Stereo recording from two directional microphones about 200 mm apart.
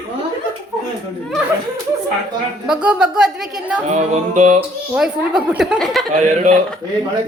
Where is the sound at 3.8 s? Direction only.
35° right (ahead or behind).